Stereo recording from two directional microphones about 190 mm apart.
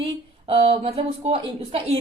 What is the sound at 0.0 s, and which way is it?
A woman's voice, 30° right (ahead or behind).